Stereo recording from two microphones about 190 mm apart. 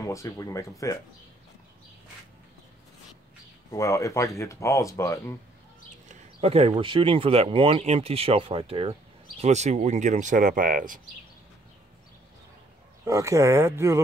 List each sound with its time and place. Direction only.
0.0 s speech: 15° left (ahead or behind)
3.7 s speech: 15° left (ahead or behind)
6.0 s speech: 35° right (ahead or behind)
13.0 s speech: 15° right (ahead or behind)